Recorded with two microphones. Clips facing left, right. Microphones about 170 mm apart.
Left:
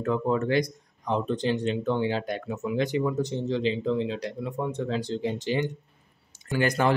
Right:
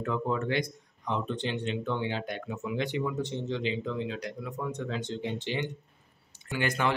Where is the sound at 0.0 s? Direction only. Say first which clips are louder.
Left 5 dB; 40° left (ahead or behind).